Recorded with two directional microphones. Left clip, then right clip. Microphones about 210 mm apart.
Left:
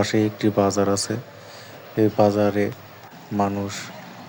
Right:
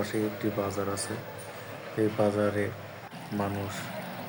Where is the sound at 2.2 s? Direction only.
30° left (ahead or behind).